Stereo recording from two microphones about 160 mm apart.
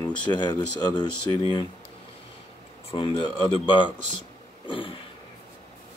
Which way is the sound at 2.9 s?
30° left (ahead or behind).